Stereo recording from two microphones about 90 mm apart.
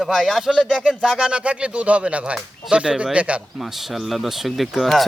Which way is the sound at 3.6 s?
5° right (ahead or behind).